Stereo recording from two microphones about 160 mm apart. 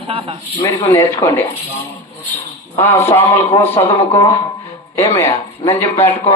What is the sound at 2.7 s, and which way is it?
Speech, 15° left (ahead or behind).